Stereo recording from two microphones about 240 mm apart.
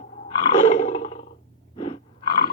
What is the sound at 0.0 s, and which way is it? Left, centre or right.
Roar, left.